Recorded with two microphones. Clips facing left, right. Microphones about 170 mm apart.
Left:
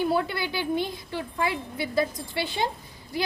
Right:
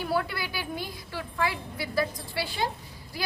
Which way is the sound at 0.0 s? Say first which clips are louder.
Left 4 dB; 25° left (ahead or behind).